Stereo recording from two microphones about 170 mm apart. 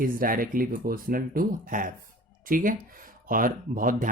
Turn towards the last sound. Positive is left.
turn(degrees=-55)  # may be behind; listen again after turning